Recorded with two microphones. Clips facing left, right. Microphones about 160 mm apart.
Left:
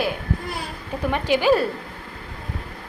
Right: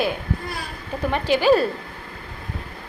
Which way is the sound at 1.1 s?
15° left (ahead or behind).